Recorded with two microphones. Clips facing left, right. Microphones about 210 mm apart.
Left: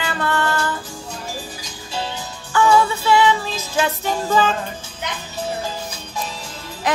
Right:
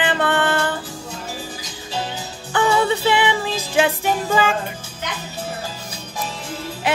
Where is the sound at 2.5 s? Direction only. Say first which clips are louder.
Left 2 dB; 20° right (ahead or behind).